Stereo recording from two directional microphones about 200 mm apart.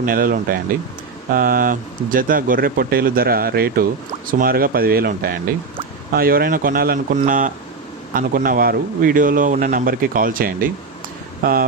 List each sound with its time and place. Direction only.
0.0 s speech: 45° right (ahead or behind)